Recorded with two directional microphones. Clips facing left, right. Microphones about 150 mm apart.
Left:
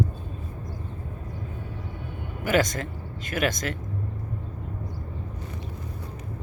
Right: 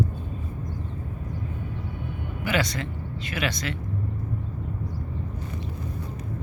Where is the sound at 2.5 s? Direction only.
45° left (ahead or behind).